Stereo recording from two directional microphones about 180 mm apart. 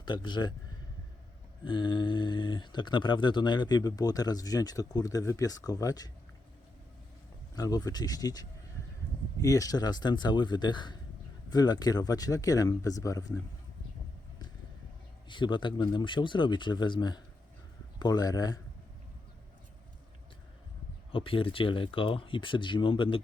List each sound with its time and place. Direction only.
0.0 s speech: 25° left (ahead or behind)
1.6 s speech: 25° left (ahead or behind)
7.5 s speech: 20° left (ahead or behind)
15.3 s speech: 25° left (ahead or behind)
21.1 s speech: 30° left (ahead or behind)